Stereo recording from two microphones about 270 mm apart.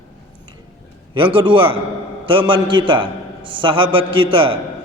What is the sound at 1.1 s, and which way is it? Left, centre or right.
A man's voice, centre.